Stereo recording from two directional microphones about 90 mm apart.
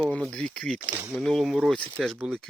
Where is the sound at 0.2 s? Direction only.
5° left (ahead or behind).